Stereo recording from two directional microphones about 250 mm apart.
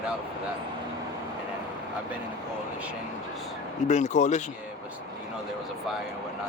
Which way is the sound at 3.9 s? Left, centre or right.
Left.